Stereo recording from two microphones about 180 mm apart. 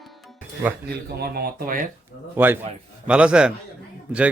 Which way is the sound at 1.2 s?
55° right (ahead or behind).